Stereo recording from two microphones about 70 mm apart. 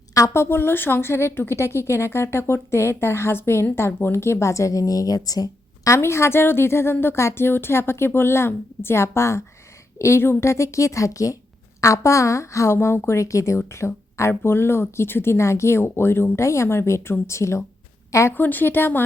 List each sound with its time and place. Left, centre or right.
0.1 s a woman's voice: left
0.4 s speech: left
5.9 s a woman's voice: left
18.3 s a woman's voice: left